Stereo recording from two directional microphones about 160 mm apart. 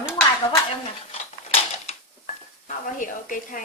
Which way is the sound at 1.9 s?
50° left (ahead or behind).